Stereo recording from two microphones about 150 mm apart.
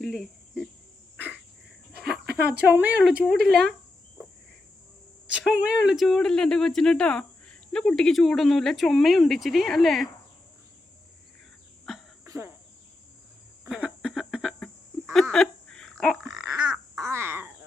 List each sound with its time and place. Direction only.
0.0 s cricket: centre (ahead or behind)
2.2 s a sound: 90° right
2.6 s a woman's voice: 10° right (ahead or behind)
3.4 s speech: centre (ahead or behind)
5.3 s speech: 5° right (ahead or behind)
12.2 s cricket: 20° right (ahead or behind)
13.7 s a sound: 5° right (ahead or behind)
16.5 s babbling: 25° right (ahead or behind)
17.0 s crow: 15° right (ahead or behind)